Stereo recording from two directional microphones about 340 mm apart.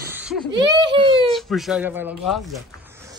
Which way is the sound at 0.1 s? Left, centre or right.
Centre.